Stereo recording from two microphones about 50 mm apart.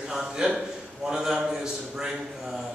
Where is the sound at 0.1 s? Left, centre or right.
Centre.